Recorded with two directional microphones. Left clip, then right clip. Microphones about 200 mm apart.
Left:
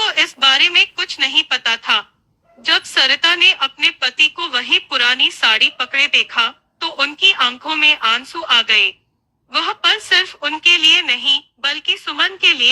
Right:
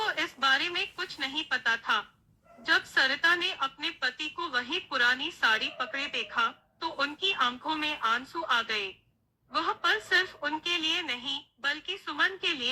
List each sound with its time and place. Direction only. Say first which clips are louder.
0.0 s a sound: left 14 dB; 45° left (ahead or behind)
0.5 s a woman's voice: left 16 dB; 50° left (ahead or behind)
1.5 s a woman's voice: left 10 dB; 20° left (ahead or behind)
1.8 s a woman's voice: left 12 dB; 45° left (ahead or behind)
11.2 s a woman's voice: left 19 dB; 20° left (ahead or behind)
11.6 s a woman's voice: left 14 dB; 50° left (ahead or behind)